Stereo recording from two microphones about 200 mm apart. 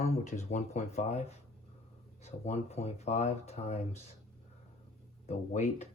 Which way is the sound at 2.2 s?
30° left (ahead or behind).